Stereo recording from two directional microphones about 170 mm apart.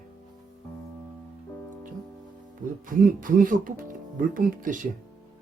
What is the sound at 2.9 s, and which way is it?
Speech, 50° right (ahead or behind).